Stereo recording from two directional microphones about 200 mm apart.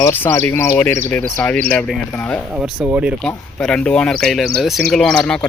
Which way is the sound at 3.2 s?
5° left (ahead or behind).